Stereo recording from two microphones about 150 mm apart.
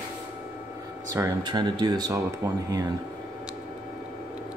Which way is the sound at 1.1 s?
20° right (ahead or behind).